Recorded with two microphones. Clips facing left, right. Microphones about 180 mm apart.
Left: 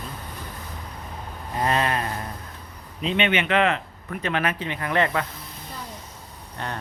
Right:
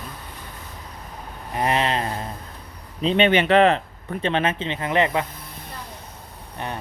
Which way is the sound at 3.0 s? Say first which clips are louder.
Right 5 dB; 35° right (ahead or behind).